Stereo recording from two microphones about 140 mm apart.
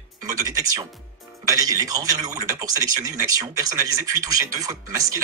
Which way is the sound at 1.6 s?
25° right (ahead or behind).